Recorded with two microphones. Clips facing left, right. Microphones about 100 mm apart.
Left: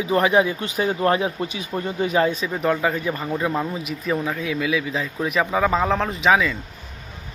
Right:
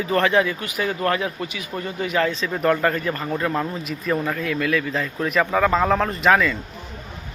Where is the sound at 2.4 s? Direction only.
5° left (ahead or behind).